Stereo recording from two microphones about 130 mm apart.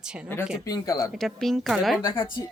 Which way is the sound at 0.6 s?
25° left (ahead or behind).